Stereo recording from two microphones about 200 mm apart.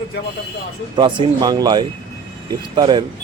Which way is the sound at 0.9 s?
25° right (ahead or behind).